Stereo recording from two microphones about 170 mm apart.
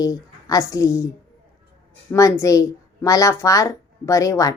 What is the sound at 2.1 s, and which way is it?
A woman's voice, 20° left (ahead or behind).